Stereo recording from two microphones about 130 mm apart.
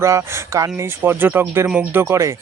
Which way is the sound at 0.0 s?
20° right (ahead or behind).